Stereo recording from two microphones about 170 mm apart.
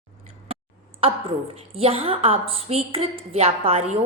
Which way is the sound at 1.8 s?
35° right (ahead or behind).